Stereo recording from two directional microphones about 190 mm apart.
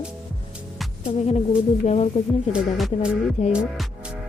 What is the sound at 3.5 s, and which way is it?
Speech, centre (ahead or behind).